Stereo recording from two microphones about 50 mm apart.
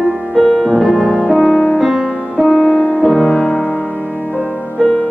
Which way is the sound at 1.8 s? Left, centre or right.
Centre.